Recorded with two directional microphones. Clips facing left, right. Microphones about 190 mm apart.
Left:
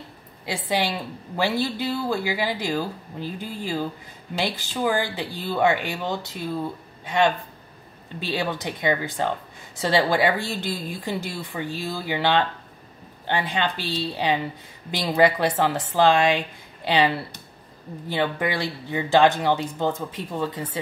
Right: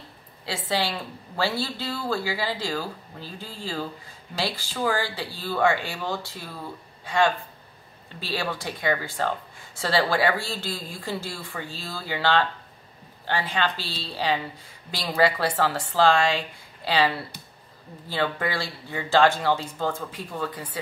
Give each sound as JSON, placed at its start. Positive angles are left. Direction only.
{"t": 0.7, "sound": "a woman's voice", "side_deg": 15}